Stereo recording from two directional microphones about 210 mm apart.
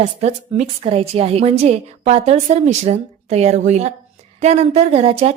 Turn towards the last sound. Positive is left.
turn(degrees=-30)  # may be behind; listen again after turning